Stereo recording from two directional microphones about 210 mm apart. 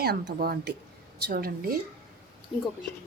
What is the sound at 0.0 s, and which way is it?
Speech, 50° right (ahead or behind).